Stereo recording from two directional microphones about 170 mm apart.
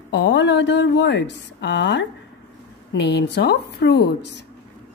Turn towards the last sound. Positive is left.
turn(degrees=85)